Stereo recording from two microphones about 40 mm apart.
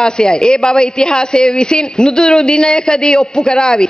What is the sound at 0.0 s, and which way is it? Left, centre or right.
A woman's voice, centre.